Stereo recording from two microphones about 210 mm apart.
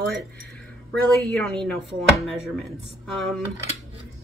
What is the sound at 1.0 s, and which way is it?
Speech, 5° left (ahead or behind).